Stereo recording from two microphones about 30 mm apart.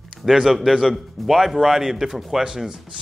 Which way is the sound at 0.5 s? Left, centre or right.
Centre.